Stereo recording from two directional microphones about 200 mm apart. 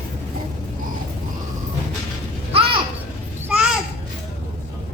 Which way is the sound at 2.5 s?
25° right (ahead or behind).